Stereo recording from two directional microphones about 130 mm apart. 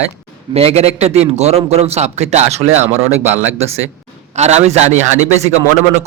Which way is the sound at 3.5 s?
55° right (ahead or behind).